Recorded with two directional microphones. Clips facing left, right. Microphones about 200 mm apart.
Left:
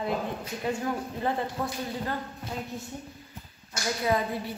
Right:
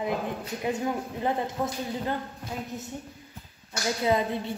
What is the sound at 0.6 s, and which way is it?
A woman's voice, 20° right (ahead or behind).